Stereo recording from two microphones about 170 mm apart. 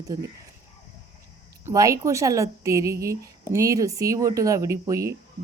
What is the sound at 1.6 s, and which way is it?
A woman's voice, 20° right (ahead or behind).